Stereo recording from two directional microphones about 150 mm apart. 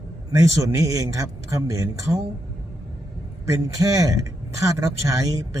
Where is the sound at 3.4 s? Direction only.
20° right (ahead or behind).